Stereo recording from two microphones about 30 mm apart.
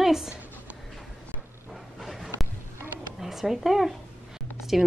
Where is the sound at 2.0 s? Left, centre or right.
Centre.